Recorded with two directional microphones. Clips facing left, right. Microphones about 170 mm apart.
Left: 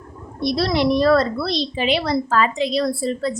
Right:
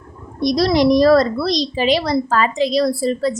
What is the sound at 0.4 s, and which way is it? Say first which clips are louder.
A woman's voice: right 4 dB; 40° right (ahead or behind).